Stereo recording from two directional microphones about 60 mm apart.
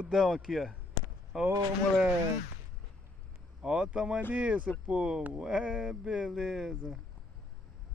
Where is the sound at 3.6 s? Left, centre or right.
Centre.